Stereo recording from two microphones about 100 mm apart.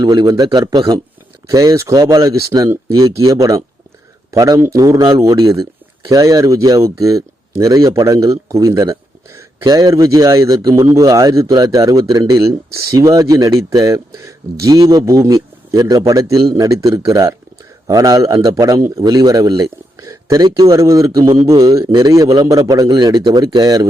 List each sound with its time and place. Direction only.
0.0 s a man's voice: 45° right (ahead or behind)
12.4 s speech: 30° right (ahead or behind)